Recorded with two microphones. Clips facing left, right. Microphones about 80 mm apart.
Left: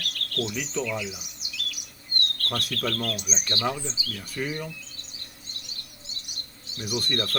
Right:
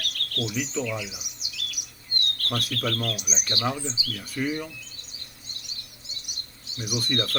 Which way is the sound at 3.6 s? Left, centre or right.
Centre.